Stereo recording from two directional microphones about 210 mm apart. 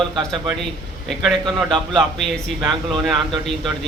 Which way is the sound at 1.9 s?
Centre (ahead or behind).